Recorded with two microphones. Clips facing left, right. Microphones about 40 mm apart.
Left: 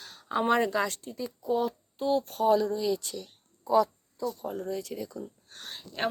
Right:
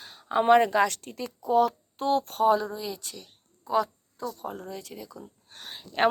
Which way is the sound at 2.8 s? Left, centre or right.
Centre.